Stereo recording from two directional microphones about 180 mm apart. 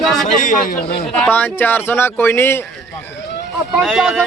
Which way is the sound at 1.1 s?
10° left (ahead or behind).